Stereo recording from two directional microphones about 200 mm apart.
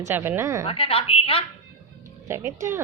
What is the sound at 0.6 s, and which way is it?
Speech, 30° left (ahead or behind).